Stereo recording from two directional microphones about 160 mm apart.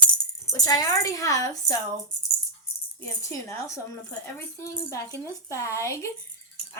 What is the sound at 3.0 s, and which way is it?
Speech, 20° left (ahead or behind).